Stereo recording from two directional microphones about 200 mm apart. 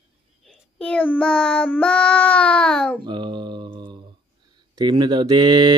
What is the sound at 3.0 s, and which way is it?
Mantra, 25° right (ahead or behind).